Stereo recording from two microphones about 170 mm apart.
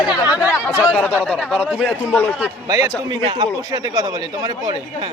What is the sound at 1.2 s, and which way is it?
Speech, 5° left (ahead or behind).